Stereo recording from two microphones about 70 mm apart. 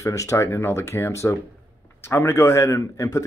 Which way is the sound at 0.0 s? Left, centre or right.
Left.